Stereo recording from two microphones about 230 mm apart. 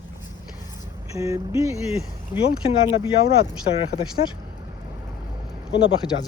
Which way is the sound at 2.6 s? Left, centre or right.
Left.